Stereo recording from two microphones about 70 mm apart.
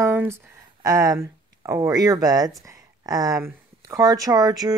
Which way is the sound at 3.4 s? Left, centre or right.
Right.